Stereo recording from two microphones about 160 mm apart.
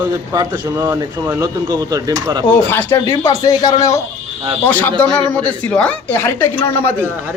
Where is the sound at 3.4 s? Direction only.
25° left (ahead or behind).